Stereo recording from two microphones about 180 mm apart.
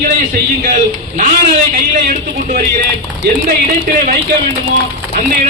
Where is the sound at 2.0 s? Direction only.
55° right (ahead or behind).